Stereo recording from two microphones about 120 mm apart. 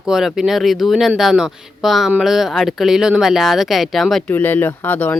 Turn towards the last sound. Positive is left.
turn(degrees=15)  # may be behind; listen again after turning